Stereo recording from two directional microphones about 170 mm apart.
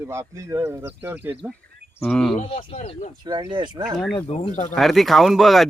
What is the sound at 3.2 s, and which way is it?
Speech, 25° right (ahead or behind).